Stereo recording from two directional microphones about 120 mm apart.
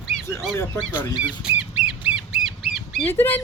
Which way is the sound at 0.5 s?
25° left (ahead or behind).